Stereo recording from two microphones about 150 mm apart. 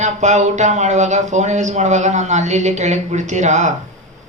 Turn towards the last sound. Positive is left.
turn(degrees=-50)  # may be behind; listen again after turning